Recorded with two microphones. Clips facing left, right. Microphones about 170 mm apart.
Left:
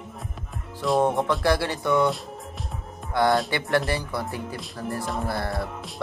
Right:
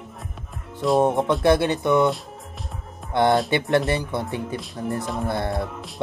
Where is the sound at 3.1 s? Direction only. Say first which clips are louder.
Right 3 dB; 20° right (ahead or behind).